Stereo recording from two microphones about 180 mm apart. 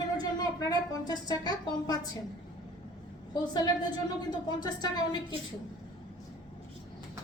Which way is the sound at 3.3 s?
20° left (ahead or behind).